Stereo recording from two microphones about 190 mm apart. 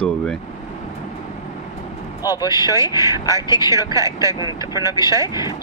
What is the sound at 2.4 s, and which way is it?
Speech, 15° right (ahead or behind).